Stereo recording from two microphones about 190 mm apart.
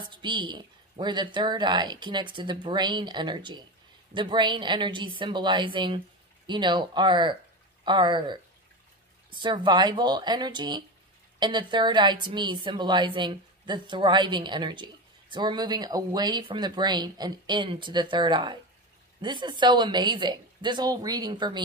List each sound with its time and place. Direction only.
0.0 s a woman's voice: 25° right (ahead or behind)